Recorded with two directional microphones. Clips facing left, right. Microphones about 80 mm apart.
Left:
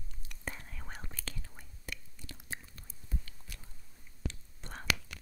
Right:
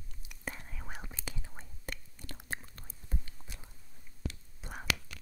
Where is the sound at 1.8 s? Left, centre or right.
Right.